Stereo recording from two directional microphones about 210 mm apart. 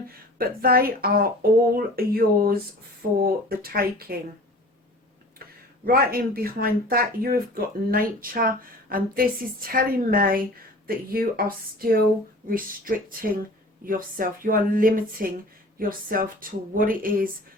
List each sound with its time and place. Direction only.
0.1 s speech: 45° right (ahead or behind)
5.8 s speech: 45° right (ahead or behind)